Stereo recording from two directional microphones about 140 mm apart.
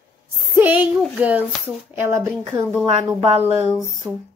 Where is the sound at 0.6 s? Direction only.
10° right (ahead or behind).